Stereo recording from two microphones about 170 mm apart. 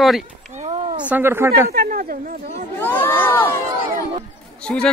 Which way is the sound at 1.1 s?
15° right (ahead or behind).